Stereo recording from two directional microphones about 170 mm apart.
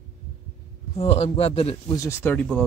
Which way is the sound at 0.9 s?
35° left (ahead or behind).